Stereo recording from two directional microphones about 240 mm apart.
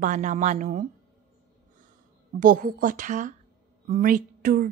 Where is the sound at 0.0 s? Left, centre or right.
Right.